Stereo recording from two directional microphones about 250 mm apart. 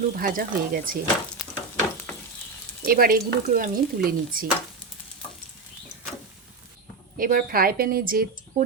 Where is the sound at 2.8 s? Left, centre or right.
Right.